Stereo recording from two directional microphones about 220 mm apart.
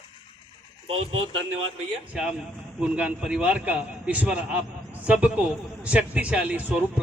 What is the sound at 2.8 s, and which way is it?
A man's voice, 5° right (ahead or behind).